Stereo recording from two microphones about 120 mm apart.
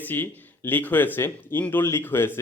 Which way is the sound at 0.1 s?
15° left (ahead or behind).